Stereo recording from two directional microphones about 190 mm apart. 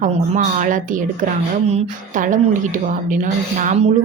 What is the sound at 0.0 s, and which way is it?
Speech, 45° right (ahead or behind).